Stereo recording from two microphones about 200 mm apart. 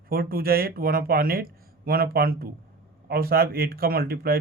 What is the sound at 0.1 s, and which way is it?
Speech, 50° right (ahead or behind).